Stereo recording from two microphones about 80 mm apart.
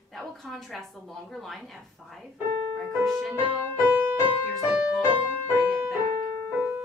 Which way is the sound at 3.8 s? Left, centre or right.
Right.